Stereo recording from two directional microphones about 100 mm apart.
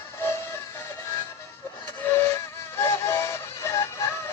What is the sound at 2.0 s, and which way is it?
Music, 25° left (ahead or behind).